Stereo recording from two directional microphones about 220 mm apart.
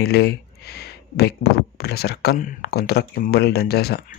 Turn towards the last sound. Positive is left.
turn(degrees=45)  # may be behind; listen again after turning